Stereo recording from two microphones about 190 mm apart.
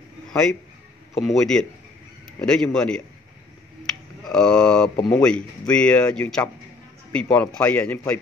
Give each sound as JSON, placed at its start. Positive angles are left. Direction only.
{"t": 1.1, "sound": "speech", "side_deg": 0}
{"t": 4.3, "sound": "a man's voice", "side_deg": 5}